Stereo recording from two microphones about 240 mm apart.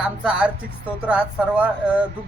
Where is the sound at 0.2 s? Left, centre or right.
Centre.